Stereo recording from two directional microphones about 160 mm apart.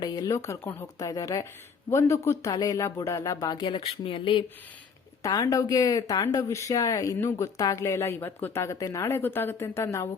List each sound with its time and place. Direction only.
0.0 s speech: 20° left (ahead or behind)